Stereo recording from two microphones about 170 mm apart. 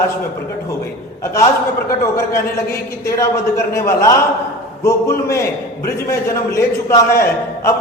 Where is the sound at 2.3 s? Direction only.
15° left (ahead or behind).